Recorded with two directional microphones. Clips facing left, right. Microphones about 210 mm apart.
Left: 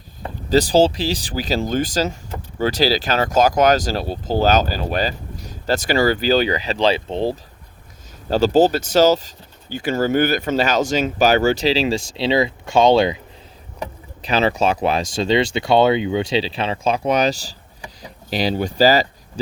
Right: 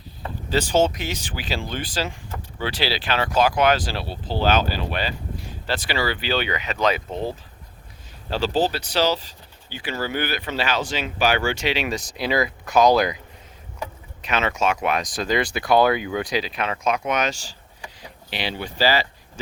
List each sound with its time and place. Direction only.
0.5 s speech: 35° left (ahead or behind)
8.3 s speech: 45° left (ahead or behind)